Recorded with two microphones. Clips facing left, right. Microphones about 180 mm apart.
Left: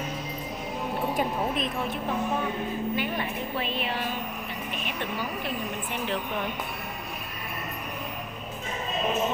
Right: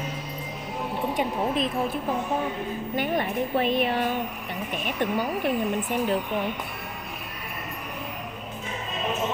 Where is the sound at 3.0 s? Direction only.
50° right (ahead or behind).